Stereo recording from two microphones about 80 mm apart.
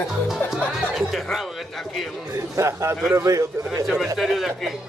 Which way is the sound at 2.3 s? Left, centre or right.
Right.